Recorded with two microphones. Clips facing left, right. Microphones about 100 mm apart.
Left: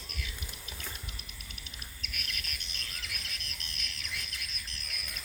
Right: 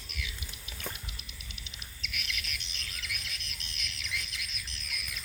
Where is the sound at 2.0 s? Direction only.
45° left (ahead or behind).